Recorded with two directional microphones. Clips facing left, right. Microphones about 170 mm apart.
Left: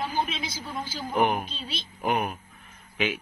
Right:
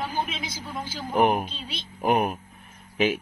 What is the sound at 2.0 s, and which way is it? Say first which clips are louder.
Speech: right 4 dB; 40° right (ahead or behind).